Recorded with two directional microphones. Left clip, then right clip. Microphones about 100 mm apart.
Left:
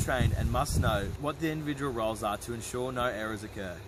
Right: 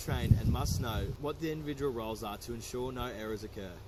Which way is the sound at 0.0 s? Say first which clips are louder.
Left 6 dB; 25° left (ahead or behind).